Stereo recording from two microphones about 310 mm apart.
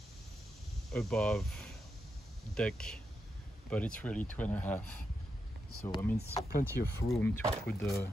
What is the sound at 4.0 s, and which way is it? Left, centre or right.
Speech, centre.